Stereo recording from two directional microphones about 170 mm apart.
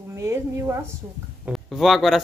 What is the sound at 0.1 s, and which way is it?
Speech, 15° right (ahead or behind).